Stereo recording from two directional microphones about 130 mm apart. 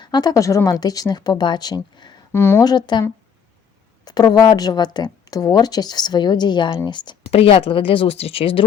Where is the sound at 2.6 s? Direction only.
35° left (ahead or behind).